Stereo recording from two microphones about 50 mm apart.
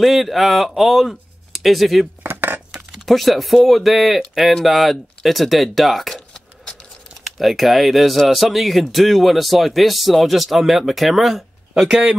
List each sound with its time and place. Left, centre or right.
0.0 s speech: centre
2.2 s a sound: right
3.1 s speech: centre
7.2 s speech: centre
11.7 s speech: centre